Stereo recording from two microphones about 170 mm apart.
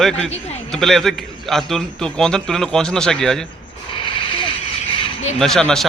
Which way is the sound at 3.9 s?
30° left (ahead or behind).